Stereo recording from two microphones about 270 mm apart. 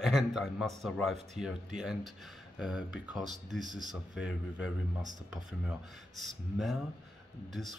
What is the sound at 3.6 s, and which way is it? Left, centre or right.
Speech, right.